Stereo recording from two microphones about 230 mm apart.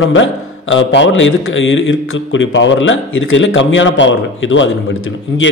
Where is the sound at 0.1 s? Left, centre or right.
Left.